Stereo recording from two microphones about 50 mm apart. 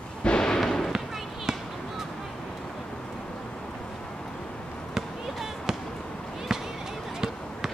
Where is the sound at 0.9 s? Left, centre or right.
Centre.